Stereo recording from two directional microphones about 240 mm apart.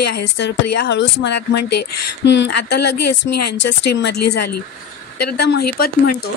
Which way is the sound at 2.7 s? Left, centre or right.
Left.